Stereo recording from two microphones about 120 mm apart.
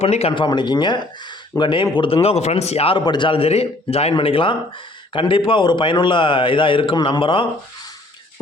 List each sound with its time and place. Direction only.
0.0 s speech: 60° left (ahead or behind)
0.3 s speech: 40° left (ahead or behind); by 3.0 s 55° left (ahead or behind)
3.0 s speech: 40° left (ahead or behind)